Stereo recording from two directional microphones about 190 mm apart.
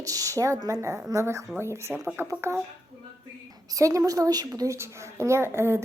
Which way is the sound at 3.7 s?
15° right (ahead or behind).